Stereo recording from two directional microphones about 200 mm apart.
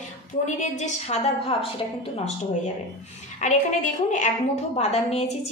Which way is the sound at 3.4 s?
35° left (ahead or behind).